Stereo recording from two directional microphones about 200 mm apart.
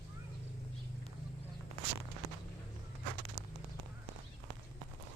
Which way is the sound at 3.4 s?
10° left (ahead or behind).